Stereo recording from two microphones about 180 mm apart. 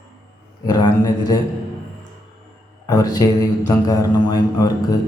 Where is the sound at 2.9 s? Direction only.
20° left (ahead or behind).